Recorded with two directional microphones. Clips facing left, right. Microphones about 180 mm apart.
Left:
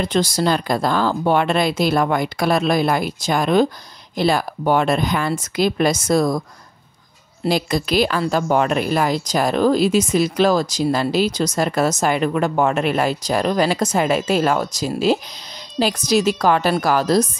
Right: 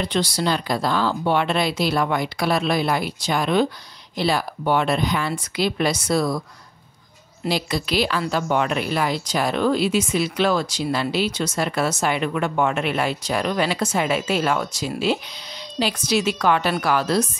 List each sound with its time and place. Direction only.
0.0 s speech: 45° left (ahead or behind)
7.4 s a woman's voice: 45° left (ahead or behind)